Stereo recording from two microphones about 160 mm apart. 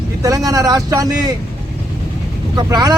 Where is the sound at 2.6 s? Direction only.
25° right (ahead or behind).